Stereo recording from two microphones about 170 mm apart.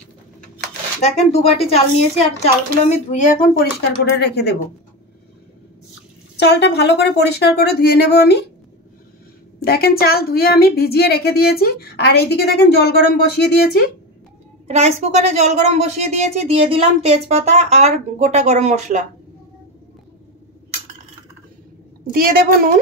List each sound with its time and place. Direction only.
1.0 s a woman's voice: 35° left (ahead or behind)
3.1 s speech: 50° left (ahead or behind); by 4.6 s 75° left (ahead or behind)
6.3 s speech: 85° left
9.6 s speech: 65° left (ahead or behind)
14.7 s a woman's voice: 40° right (ahead or behind)
22.1 s a woman's voice: 55° right (ahead or behind)